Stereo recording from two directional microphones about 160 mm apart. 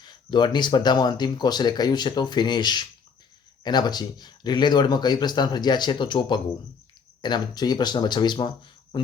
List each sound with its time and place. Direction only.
0.0 s speech: 25° left (ahead or behind)